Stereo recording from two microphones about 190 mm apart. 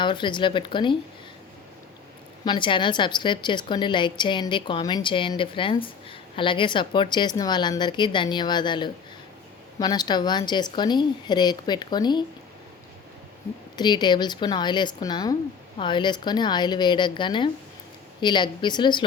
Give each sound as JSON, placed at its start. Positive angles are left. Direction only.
{"t": 0.0, "sound": "a woman's voice", "side_deg": 25}
{"t": 2.4, "sound": "a woman's voice", "side_deg": 25}
{"t": 13.7, "sound": "a woman's voice", "side_deg": 25}